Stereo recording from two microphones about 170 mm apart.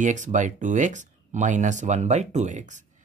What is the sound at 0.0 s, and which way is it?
Speech, 45° right (ahead or behind).